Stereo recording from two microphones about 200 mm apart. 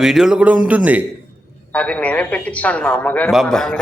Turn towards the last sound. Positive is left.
turn(degrees=0)  # may be behind; listen again after turning